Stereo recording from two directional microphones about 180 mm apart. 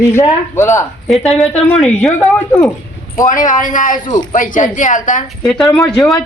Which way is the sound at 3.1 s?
45° left (ahead or behind).